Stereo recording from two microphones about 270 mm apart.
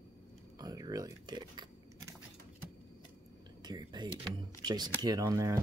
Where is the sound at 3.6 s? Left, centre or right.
Centre.